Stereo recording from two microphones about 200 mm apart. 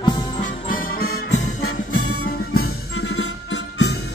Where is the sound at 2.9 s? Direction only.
90° left; by 3.9 s 60° left (ahead or behind).